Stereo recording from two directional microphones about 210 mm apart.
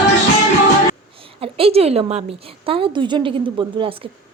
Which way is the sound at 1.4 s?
25° right (ahead or behind).